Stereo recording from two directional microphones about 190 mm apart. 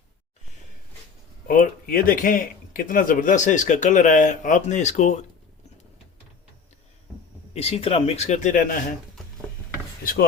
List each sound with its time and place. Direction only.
1.5 s speech: 50° left (ahead or behind)
7.5 s speech: 35° left (ahead or behind)
10.0 s speech: 50° left (ahead or behind)